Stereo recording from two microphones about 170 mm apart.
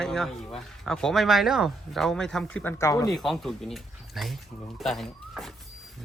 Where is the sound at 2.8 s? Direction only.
20° left (ahead or behind).